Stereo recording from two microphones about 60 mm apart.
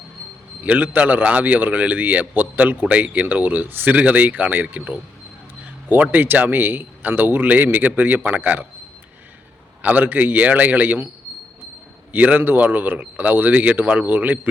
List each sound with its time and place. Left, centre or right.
0.6 s a man's voice: right
9.8 s a man's voice: right
12.1 s a man's voice: right